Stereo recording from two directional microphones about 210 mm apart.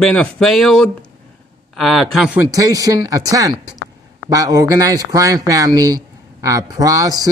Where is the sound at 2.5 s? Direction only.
15° right (ahead or behind).